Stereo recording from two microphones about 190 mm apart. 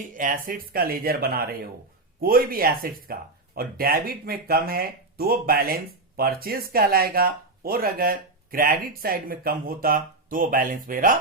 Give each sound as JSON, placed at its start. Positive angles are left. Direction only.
{"t": 0.1, "sound": "speech", "side_deg": -45}